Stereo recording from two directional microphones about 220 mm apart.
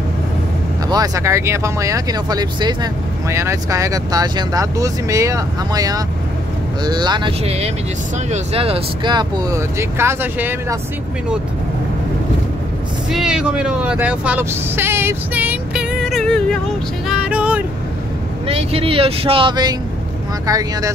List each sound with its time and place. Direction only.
0.8 s speech: 15° right (ahead or behind)
13.1 s speech: 5° right (ahead or behind)
17.1 s music: 5° right (ahead or behind)
18.5 s speech: 25° right (ahead or behind)